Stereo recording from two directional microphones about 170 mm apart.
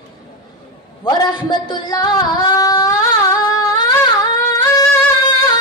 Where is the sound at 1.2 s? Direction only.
25° left (ahead or behind).